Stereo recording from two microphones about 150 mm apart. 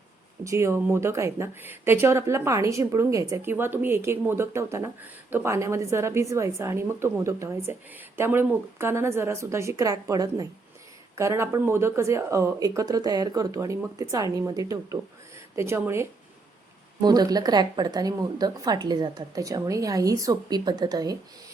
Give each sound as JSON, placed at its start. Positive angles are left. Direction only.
{"t": 0.4, "sound": "a woman's voice", "side_deg": -20}